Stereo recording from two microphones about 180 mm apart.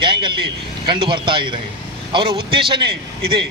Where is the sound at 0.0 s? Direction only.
25° right (ahead or behind).